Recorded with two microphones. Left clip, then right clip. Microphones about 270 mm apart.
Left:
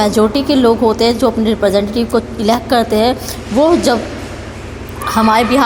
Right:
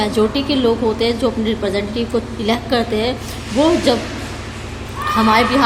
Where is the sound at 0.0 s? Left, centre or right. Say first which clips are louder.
Left 4 dB; left.